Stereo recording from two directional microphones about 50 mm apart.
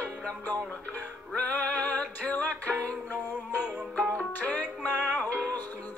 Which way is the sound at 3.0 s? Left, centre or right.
Left.